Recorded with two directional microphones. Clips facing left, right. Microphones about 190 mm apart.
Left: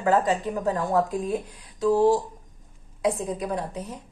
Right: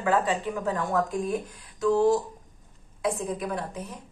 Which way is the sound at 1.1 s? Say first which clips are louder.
Left 1 dB; 20° left (ahead or behind).